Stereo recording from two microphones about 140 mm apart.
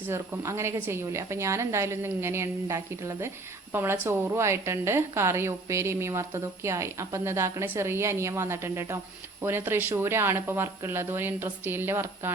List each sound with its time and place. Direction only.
0.1 s a woman's voice: 20° right (ahead or behind)